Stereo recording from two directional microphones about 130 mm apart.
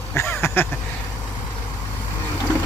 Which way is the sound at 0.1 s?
20° left (ahead or behind).